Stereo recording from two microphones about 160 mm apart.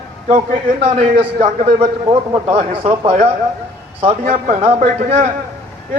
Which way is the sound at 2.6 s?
40° right (ahead or behind).